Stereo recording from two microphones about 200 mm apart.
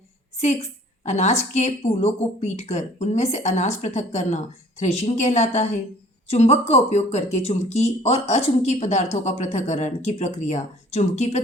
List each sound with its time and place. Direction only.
0.3 s a woman's voice: 35° left (ahead or behind)